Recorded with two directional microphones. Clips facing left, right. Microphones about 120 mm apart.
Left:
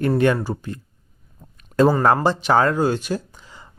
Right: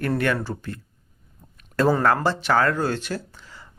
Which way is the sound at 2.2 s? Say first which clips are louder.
Left 3 dB; 15° left (ahead or behind).